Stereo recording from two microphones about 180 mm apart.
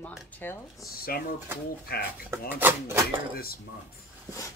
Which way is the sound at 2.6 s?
10° right (ahead or behind).